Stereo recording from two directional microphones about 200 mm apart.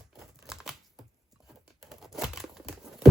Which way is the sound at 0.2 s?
Centre (ahead or behind).